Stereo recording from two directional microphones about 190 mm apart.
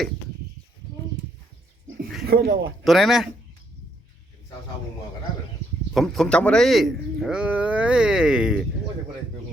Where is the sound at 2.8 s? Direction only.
Centre (ahead or behind).